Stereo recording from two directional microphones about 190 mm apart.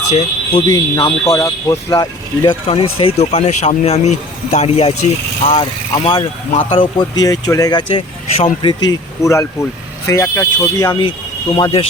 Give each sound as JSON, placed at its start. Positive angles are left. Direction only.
{"t": 0.2, "sound": "speech", "side_deg": 30}
{"t": 0.9, "sound": "speech", "side_deg": 15}
{"t": 6.0, "sound": "speech", "side_deg": 30}